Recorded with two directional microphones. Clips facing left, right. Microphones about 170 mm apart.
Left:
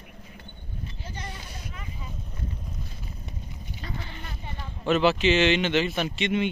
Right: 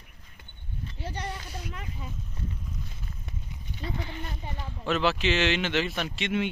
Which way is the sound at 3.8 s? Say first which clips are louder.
Right 4 dB; 15° right (ahead or behind).